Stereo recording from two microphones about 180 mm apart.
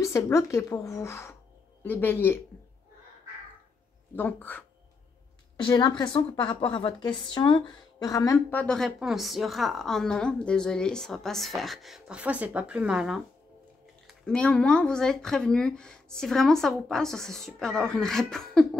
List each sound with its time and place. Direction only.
0.0 s speech: 15° left (ahead or behind)
4.1 s speech: 10° left (ahead or behind)
5.7 s a woman's voice: 25° left (ahead or behind); by 18.7 s centre (ahead or behind)